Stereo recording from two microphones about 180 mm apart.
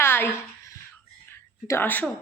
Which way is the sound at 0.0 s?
10° left (ahead or behind).